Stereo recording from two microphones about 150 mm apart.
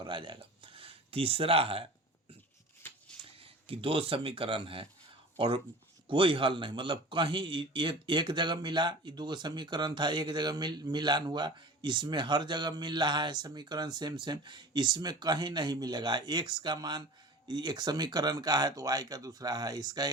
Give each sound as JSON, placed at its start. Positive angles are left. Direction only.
{"t": 0.0, "sound": "speech", "side_deg": -30}
{"t": 3.3, "sound": "a man's voice", "side_deg": -40}